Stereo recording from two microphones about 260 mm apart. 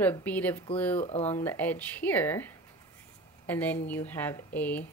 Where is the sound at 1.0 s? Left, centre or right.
Left.